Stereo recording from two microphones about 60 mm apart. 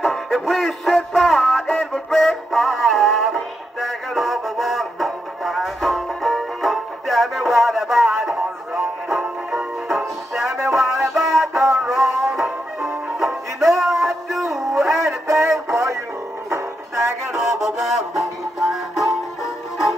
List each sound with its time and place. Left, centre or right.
0.0 s music: centre
9.8 s music: centre
15.2 s a sound: right
16.4 s music: right
17.3 s music: centre